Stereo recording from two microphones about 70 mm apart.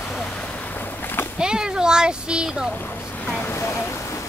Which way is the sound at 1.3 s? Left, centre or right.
Centre.